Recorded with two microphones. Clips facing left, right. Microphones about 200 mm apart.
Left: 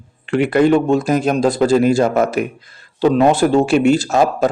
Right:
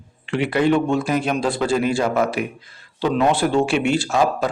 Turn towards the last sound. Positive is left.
turn(degrees=45)  # may be behind; listen again after turning